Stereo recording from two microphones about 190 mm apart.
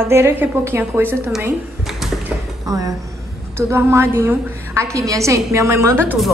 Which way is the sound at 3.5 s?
10° right (ahead or behind).